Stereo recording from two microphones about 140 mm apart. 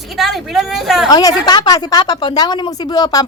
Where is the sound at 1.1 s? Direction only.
25° left (ahead or behind).